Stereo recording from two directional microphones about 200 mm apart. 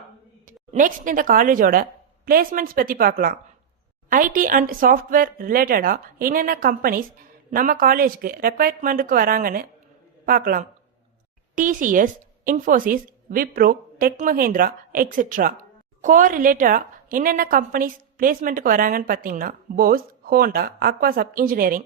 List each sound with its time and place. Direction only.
0.4 s a woman's voice: 40° right (ahead or behind)